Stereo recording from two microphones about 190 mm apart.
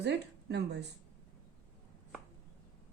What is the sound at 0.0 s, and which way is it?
Speech, 60° right (ahead or behind).